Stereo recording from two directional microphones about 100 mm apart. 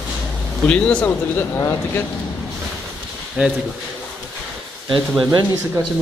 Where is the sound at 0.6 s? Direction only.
10° left (ahead or behind).